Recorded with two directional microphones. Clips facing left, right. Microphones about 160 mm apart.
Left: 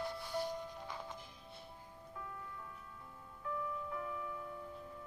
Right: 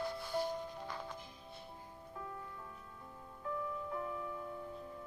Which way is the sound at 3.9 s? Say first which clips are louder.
Right 2 dB; 35° right (ahead or behind).